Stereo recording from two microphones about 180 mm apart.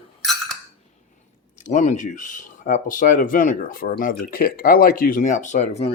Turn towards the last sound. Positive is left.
turn(degrees=35)  # may be behind; listen again after turning